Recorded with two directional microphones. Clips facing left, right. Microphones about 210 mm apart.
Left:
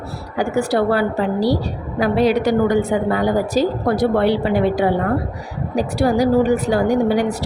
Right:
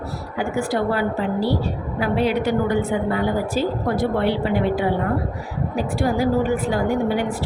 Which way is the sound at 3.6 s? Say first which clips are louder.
Left 5 dB; 85° left.